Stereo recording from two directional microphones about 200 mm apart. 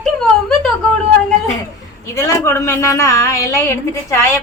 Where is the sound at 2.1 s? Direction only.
15° left (ahead or behind).